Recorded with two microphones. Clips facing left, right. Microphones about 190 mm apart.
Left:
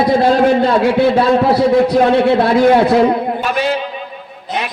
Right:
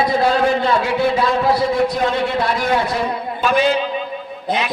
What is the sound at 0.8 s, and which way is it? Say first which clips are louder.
A man's voice: left 6 dB; 65° left (ahead or behind).